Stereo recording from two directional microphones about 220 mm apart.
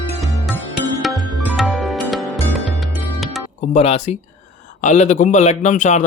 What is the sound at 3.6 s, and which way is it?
A man's voice, 30° left (ahead or behind).